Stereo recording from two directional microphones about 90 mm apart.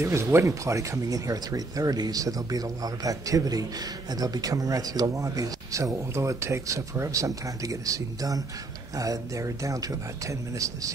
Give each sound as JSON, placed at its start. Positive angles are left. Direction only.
{"t": 0.0, "sound": "speech", "side_deg": -30}